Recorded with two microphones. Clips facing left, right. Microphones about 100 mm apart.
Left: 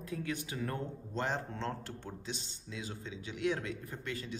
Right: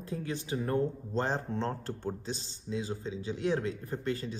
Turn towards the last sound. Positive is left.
turn(degrees=-35)  # may be behind; listen again after turning